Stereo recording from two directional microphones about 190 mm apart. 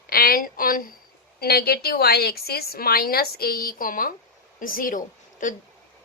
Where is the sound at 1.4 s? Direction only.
55° left (ahead or behind).